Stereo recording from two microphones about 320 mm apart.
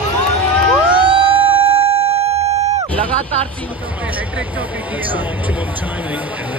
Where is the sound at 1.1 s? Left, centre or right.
Centre.